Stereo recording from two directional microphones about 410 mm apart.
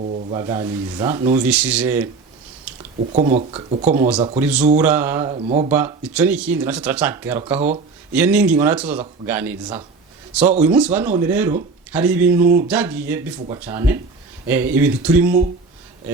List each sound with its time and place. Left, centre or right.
0.0 s speech: centre
2.7 s a sound: centre
3.1 s speech: centre
5.7 s speech: centre